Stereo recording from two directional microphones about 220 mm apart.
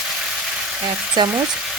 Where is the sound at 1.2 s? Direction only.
20° right (ahead or behind).